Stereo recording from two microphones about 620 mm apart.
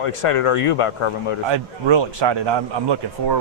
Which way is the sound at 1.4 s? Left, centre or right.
Right.